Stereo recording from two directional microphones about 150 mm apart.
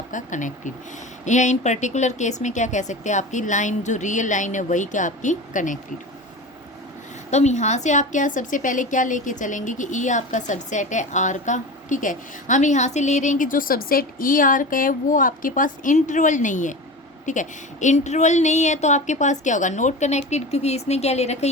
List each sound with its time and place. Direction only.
0.1 s a woman's voice: 60° left (ahead or behind)
7.3 s a woman's voice: 50° left (ahead or behind)